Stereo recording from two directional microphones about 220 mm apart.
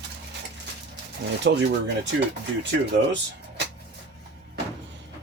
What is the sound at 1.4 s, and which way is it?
Speech, 50° right (ahead or behind).